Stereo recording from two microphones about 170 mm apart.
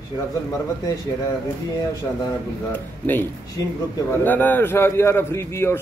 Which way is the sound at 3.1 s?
15° left (ahead or behind).